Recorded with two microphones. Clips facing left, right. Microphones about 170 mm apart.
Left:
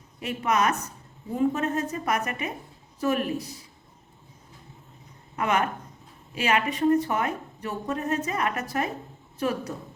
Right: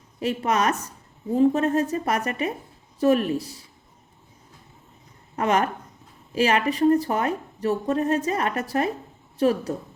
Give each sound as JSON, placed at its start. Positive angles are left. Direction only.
{"t": 0.2, "sound": "a woman's voice", "side_deg": -35}
{"t": 5.4, "sound": "a woman's voice", "side_deg": -35}